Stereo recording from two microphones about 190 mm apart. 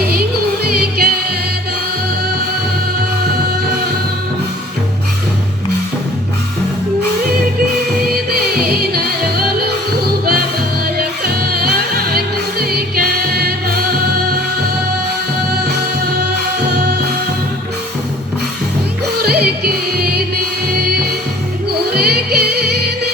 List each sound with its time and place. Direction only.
0.6 s music: 55° right (ahead or behind)
8.1 s music: 55° right (ahead or behind)
10.9 s music: 55° right (ahead or behind)
16.6 s music: 55° right (ahead or behind)
19.1 s music: 55° right (ahead or behind)
21.7 s music: 55° right (ahead or behind)